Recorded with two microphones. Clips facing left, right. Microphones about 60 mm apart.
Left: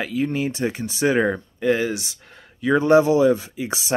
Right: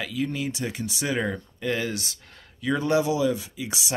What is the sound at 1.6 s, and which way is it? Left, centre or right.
Speech, left.